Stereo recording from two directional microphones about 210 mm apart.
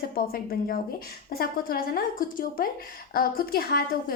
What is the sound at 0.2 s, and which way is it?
A woman's voice, 45° left (ahead or behind).